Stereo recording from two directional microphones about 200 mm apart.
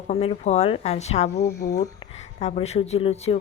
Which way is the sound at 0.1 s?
35° left (ahead or behind).